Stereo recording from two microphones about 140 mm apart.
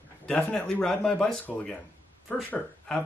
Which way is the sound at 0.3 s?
5° left (ahead or behind).